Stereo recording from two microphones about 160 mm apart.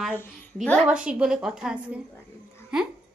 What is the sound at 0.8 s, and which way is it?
A woman's voice, 5° right (ahead or behind).